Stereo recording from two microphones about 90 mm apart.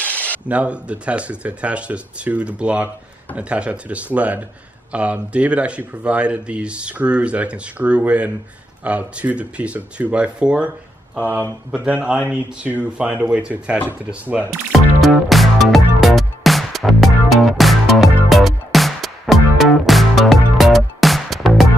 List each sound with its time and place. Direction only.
0.0 s a sound: 15° left (ahead or behind)
0.5 s speech: 15° right (ahead or behind)
11.7 s speech: 15° right (ahead or behind)
14.7 s music: centre (ahead or behind)